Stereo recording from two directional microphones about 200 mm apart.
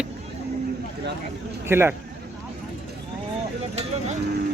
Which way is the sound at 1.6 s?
10° right (ahead or behind).